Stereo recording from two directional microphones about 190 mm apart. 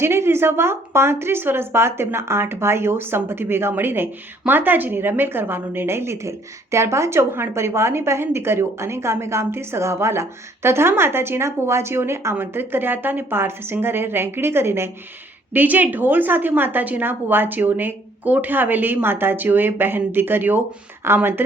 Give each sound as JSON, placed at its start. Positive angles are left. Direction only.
{"t": 0.0, "sound": "speech", "side_deg": -15}